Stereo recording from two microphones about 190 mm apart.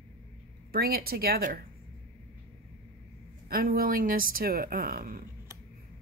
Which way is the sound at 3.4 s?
50° right (ahead or behind).